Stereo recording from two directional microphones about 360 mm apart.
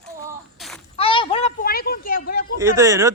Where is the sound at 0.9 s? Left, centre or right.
Centre.